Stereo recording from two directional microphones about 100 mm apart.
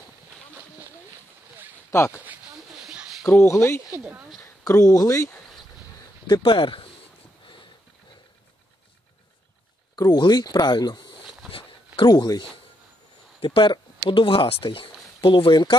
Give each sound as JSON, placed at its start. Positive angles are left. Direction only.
{"t": 1.9, "sound": "speech", "side_deg": 30}
{"t": 2.8, "sound": "a sound", "side_deg": -10}
{"t": 3.3, "sound": "speech", "side_deg": 30}
{"t": 6.2, "sound": "speech", "side_deg": 55}
{"t": 9.9, "sound": "speech", "side_deg": 45}
{"t": 11.5, "sound": "dog", "side_deg": 55}
{"t": 13.4, "sound": "speech", "side_deg": 60}